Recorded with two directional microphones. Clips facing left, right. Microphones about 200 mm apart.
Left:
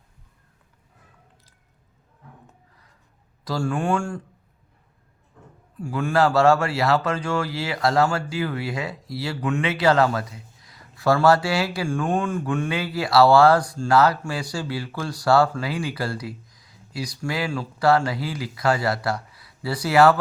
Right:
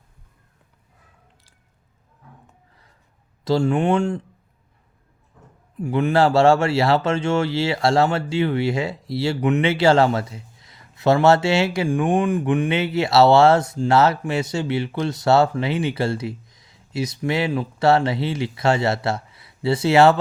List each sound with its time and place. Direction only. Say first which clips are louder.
3.4 s speech: right 6 dB; 25° right (ahead or behind)
5.8 s speech: right 3 dB; 20° right (ahead or behind)